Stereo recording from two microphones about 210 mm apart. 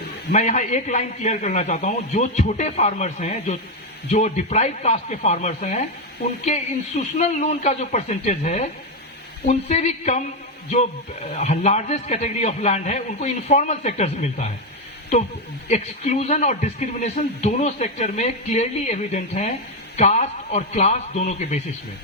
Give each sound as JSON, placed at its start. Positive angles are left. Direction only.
{"t": 0.3, "sound": "speech", "side_deg": 35}
{"t": 11.4, "sound": "speech", "side_deg": 30}
{"t": 15.7, "sound": "speech", "side_deg": 30}